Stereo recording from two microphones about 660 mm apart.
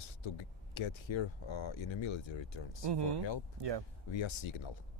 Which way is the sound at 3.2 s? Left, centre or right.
Left.